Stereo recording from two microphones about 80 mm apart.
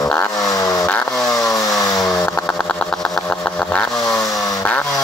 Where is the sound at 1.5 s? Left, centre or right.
Left.